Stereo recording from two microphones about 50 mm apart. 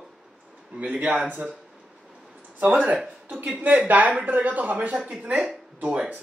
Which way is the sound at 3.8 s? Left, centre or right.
Right.